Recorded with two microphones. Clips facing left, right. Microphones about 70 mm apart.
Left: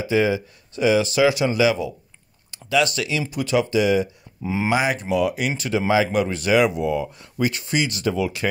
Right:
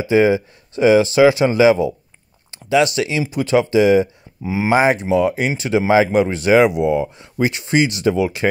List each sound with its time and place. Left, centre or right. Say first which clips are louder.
0.0 s speech: right 6 dB; right
4.4 s speech: right 3 dB; centre
4.6 s speech: right 7 dB; right